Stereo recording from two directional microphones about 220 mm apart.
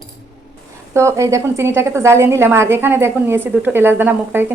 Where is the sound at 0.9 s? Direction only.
15° right (ahead or behind).